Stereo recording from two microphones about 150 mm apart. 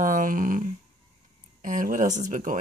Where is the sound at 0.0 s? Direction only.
60° right (ahead or behind).